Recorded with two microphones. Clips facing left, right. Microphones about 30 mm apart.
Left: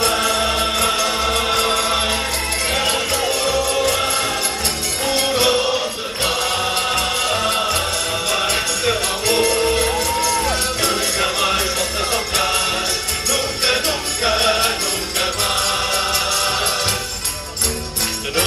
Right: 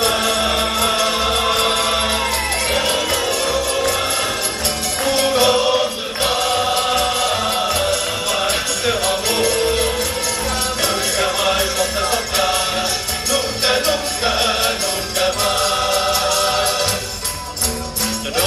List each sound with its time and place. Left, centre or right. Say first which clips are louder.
0.4 s music: right 1 dB; centre
5.3 s music: right 2 dB; centre
8.5 s music: even; centre
9.3 s music: left 3 dB; left
10.9 s music: right 1 dB; left
13.7 s music: right 3 dB; centre